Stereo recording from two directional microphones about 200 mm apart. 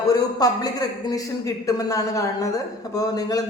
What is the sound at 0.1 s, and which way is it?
A man's voice, 20° left (ahead or behind).